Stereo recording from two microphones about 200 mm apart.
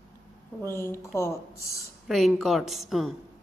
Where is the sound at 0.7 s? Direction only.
10° left (ahead or behind).